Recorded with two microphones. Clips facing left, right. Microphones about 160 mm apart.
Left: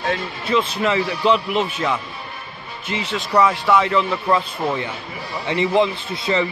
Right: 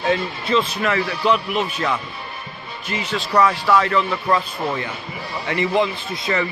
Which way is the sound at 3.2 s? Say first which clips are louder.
Even; 20° left (ahead or behind).